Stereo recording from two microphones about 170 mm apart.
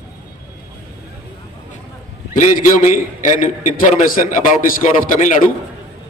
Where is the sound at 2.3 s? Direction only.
50° left (ahead or behind).